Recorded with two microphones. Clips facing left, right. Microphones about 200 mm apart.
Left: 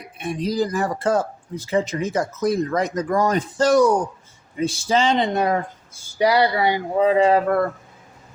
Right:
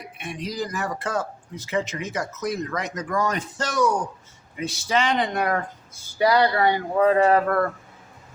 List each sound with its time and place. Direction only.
0.2 s speech: 35° left (ahead or behind); by 7.7 s 10° left (ahead or behind)